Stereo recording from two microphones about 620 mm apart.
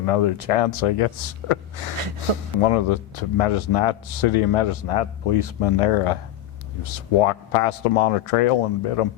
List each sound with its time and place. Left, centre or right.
0.0 s speech: left